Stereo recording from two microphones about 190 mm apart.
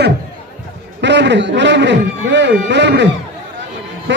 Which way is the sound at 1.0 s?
65° right (ahead or behind).